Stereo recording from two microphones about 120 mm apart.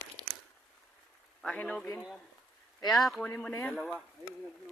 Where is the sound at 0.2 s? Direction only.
35° left (ahead or behind).